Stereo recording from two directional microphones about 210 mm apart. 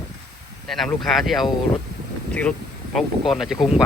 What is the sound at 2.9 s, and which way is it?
Speech, centre (ahead or behind).